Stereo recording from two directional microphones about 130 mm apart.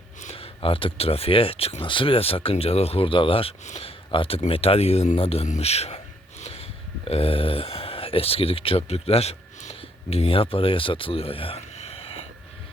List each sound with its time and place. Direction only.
0.3 s speech: 45° left (ahead or behind)